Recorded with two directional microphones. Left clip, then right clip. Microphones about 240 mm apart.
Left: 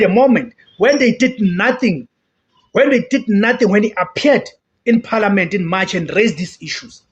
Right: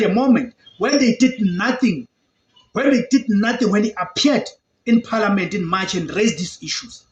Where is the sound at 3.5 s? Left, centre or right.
Left.